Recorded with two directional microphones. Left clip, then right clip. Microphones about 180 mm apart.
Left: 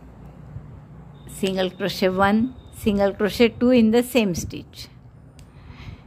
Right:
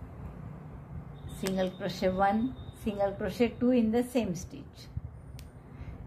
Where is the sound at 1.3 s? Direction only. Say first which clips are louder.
Left 9 dB; 45° left (ahead or behind).